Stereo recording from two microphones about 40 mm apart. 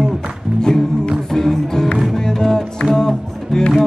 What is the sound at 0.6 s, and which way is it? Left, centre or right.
Music, centre.